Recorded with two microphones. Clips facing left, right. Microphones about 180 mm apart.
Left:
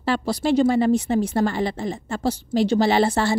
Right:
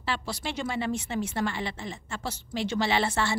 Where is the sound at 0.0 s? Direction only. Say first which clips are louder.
Left 10 dB; 40° left (ahead or behind).